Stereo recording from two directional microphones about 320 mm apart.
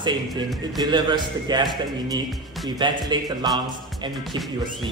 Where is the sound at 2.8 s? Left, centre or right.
Centre.